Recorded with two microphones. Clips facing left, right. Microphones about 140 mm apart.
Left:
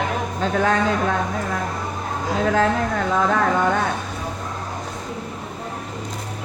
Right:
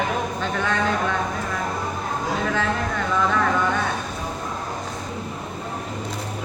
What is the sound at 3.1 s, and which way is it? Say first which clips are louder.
Speech: left 1 dB; 50° left (ahead or behind).